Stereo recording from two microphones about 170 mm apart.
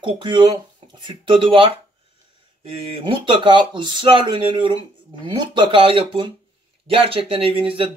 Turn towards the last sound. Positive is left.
turn(degrees=-30)  # may be behind; listen again after turning